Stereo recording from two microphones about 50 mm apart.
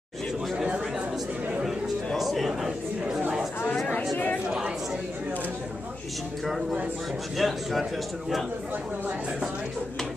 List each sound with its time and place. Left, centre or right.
2.1 s speech: centre
3.7 s speech: left
4.5 s speech: centre
7.3 s speech: centre